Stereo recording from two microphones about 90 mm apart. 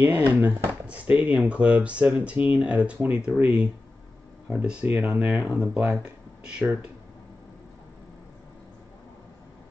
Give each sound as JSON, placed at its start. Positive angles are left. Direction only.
{"t": 0.0, "sound": "speech", "side_deg": -20}